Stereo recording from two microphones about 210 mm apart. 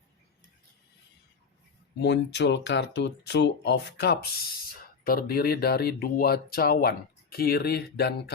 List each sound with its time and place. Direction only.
2.0 s speech: 55° left (ahead or behind)